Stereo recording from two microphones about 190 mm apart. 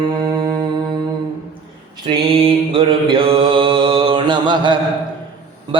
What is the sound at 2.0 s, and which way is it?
Mantra, 30° right (ahead or behind).